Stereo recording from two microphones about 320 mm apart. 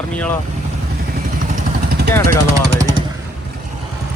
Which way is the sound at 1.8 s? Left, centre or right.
Right.